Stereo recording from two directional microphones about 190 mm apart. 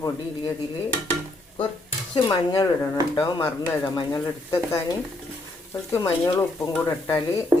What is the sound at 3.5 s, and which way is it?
A man's voice, 10° left (ahead or behind).